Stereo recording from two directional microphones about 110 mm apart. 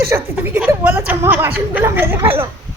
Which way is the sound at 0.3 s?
15° right (ahead or behind).